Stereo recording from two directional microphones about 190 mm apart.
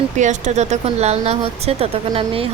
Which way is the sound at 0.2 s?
40° right (ahead or behind).